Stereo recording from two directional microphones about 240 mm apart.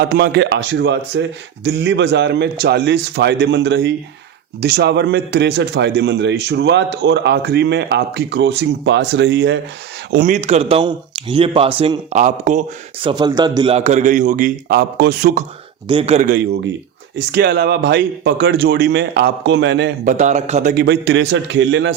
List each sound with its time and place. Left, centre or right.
0.0 s a man's voice: right
10.1 s speech: right
15.9 s speech: right
16.3 s a man's voice: right
20.1 s speech: right
20.7 s a man's voice: right